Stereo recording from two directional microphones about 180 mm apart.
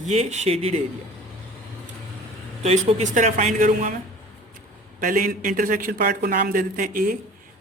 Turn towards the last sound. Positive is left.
turn(degrees=-50)  # may be behind; listen again after turning